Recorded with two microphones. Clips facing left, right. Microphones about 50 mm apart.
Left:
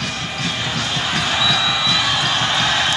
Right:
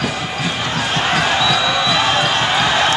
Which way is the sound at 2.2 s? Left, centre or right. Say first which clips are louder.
Right 3 dB; centre.